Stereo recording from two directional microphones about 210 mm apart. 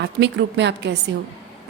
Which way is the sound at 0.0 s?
55° right (ahead or behind).